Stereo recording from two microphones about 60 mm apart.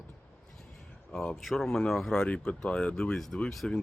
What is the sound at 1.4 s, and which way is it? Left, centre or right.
Speech, centre.